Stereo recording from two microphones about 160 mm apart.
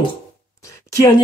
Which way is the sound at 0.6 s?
20° left (ahead or behind).